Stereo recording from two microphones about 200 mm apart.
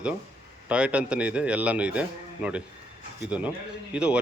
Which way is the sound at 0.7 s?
5° right (ahead or behind).